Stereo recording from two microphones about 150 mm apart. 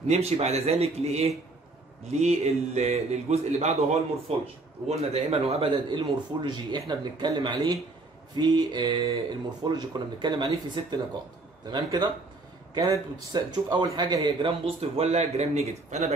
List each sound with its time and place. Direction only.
0.1 s a man's voice: 45° right (ahead or behind)
4.8 s a man's voice: 45° right (ahead or behind)